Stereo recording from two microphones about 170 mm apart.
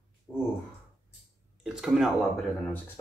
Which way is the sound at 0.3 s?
20° left (ahead or behind).